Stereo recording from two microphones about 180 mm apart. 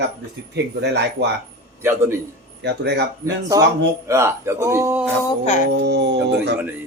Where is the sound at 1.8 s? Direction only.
15° right (ahead or behind).